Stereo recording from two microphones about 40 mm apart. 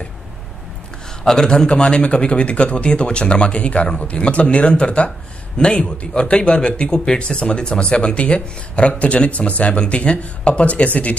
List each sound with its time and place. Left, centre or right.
1.2 s speech: centre; by 11.1 s left